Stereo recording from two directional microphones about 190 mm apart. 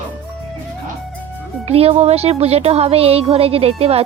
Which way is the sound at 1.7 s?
30° right (ahead or behind).